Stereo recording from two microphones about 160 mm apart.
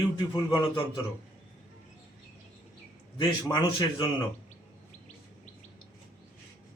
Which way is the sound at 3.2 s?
25° left (ahead or behind).